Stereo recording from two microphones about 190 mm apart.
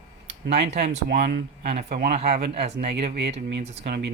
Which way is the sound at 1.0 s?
60° right (ahead or behind).